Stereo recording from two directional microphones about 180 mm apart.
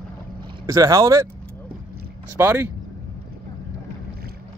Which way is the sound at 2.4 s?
10° right (ahead or behind).